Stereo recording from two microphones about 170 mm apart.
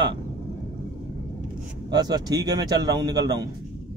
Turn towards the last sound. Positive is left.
turn(degrees=-25)  # may be behind; listen again after turning